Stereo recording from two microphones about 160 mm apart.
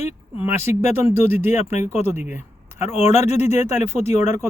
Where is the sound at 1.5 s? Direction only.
45° left (ahead or behind).